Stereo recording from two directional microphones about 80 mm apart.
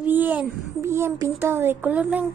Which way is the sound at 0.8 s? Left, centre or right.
Right.